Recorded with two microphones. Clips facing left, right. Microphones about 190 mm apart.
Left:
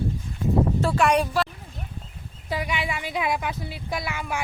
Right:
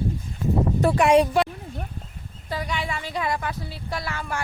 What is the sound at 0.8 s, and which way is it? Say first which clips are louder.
Speech: right 4 dB; 20° right (ahead or behind).